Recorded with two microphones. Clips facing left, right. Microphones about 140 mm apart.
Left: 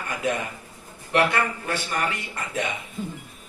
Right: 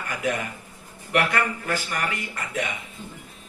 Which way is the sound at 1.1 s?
25° left (ahead or behind).